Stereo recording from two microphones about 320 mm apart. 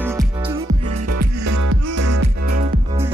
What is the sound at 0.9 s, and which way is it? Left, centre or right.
Music, right.